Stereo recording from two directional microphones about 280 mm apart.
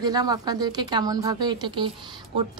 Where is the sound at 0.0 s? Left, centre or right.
Centre.